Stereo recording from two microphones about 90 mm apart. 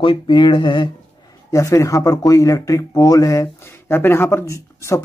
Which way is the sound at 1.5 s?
35° left (ahead or behind).